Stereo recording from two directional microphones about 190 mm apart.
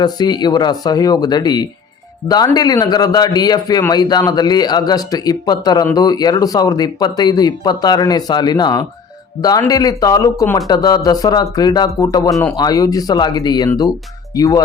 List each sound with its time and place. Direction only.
0.0 s speech: 20° left (ahead or behind)